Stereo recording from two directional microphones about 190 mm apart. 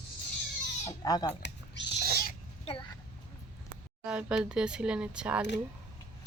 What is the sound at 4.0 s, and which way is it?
Speech, 5° right (ahead or behind).